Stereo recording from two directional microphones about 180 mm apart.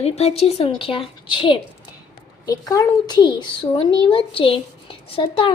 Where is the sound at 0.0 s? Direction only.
35° left (ahead or behind).